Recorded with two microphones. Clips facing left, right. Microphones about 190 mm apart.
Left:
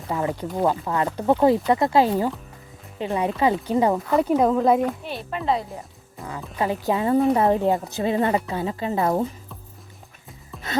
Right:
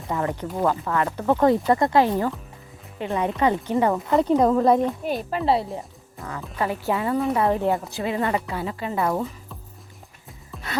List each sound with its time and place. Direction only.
0.1 s speech: 15° left (ahead or behind)
1.5 s a woman's voice: centre (ahead or behind)
1.9 s a woman's voice: 10° left (ahead or behind)
5.0 s speech: 40° right (ahead or behind)
6.2 s speech: centre (ahead or behind)
6.6 s a woman's voice: 20° left (ahead or behind)
7.6 s a woman's voice: 20° left (ahead or behind)